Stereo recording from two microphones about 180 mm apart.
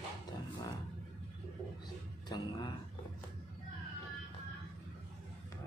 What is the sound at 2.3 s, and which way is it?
Speech, 25° left (ahead or behind).